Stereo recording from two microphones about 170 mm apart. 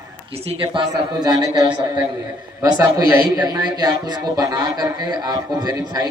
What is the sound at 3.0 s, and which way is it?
A man's voice, 15° right (ahead or behind).